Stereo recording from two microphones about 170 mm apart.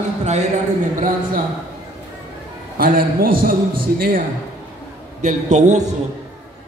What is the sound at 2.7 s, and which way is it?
Speech, 55° right (ahead or behind).